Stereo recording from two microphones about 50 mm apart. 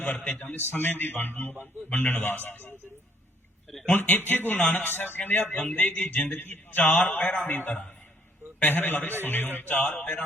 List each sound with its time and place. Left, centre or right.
0.0 s a man's voice: left
3.8 s a man's voice: left
5.5 s a man's voice: left
7.0 s speech: left
7.4 s a man's voice: left